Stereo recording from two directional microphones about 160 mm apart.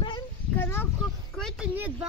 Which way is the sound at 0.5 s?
10° left (ahead or behind).